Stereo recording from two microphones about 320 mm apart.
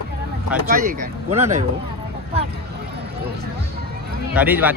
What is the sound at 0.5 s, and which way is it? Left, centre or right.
Speech, right.